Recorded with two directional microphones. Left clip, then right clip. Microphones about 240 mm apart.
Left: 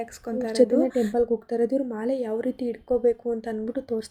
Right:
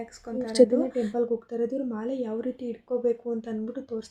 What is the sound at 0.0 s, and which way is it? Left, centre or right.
Speech, left.